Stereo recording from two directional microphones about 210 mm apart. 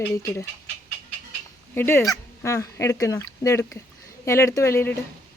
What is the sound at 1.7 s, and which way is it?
Speech, 10° left (ahead or behind).